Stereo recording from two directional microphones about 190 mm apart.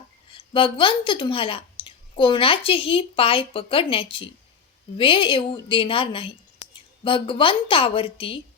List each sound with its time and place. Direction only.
0.3 s speech: 25° left (ahead or behind)